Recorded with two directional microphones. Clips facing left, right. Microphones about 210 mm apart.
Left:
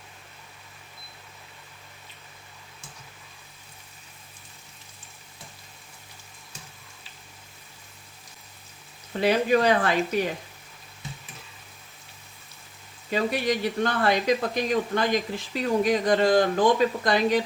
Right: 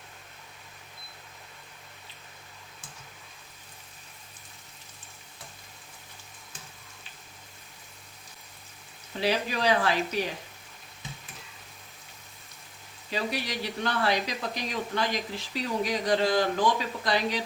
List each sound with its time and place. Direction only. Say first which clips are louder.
9.2 s speech: left 6 dB; 50° left (ahead or behind)
13.1 s speech: left 7 dB; 50° left (ahead or behind)